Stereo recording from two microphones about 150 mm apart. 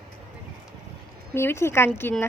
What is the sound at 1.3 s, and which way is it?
Speech, 15° left (ahead or behind).